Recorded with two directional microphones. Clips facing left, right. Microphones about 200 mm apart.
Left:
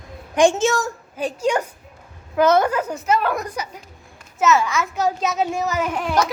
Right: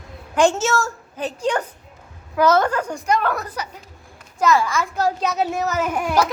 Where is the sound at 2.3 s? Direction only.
20° left (ahead or behind).